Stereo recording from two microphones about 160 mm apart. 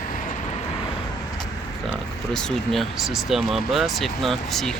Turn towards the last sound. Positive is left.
turn(degrees=0)  # may be behind; listen again after turning